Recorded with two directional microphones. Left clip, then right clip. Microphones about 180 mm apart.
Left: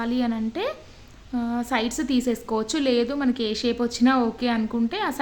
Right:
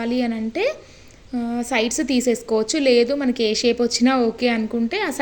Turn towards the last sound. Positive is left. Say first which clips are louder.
# right 3 dB
turn(degrees=-10)  # may be behind; listen again after turning